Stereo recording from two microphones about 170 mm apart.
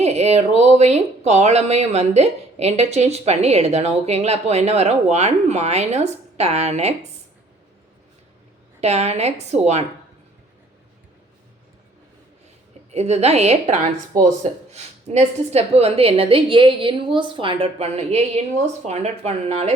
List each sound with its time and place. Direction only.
0.0 s speech: 40° right (ahead or behind)
8.8 s speech: 40° right (ahead or behind)
12.9 s speech: 40° right (ahead or behind)